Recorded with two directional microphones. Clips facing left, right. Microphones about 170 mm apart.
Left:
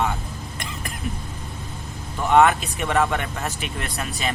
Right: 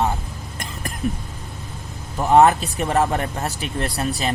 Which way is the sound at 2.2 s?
35° right (ahead or behind).